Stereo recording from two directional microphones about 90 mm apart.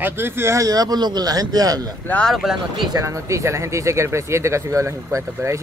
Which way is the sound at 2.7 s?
60° right (ahead or behind).